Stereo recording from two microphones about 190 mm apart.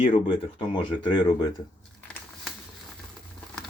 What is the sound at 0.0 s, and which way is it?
Speech, 30° left (ahead or behind).